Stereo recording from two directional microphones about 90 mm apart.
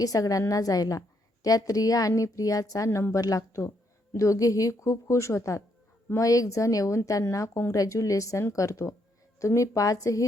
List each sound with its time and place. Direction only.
0.0 s a woman's voice: 40° left (ahead or behind)